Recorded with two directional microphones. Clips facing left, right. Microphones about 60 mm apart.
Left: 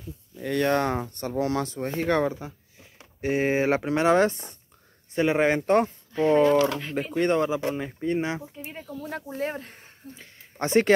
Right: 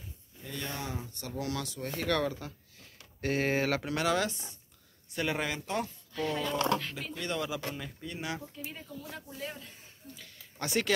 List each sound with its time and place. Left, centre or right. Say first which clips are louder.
0.4 s speech: left 16 dB; left
5.1 s speech: left 11 dB; left
5.7 s speech: left 13 dB; left
6.1 s speech: left 13 dB; left
9.1 s speech: left 13 dB; left
10.1 s speech: left 8 dB; left